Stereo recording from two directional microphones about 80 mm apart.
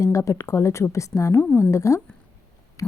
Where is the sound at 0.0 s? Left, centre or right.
Left.